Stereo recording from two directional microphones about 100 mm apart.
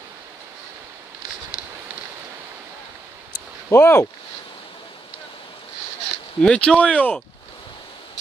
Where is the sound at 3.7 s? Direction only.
25° left (ahead or behind).